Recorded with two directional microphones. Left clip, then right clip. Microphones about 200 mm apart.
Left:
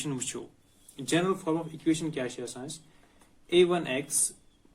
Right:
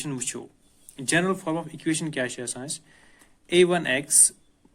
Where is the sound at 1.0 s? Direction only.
45° right (ahead or behind).